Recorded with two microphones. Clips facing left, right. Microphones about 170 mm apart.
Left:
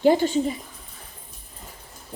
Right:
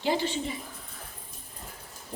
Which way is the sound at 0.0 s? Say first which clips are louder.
Left 9 dB; 45° left (ahead or behind).